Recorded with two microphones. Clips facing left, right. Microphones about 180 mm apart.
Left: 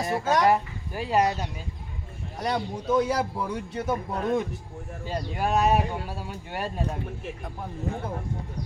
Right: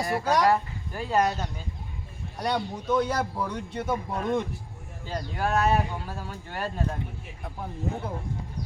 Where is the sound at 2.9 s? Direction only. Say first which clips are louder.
Left 2 dB; 5° left (ahead or behind).